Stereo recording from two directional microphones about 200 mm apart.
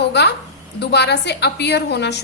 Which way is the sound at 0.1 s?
55° left (ahead or behind).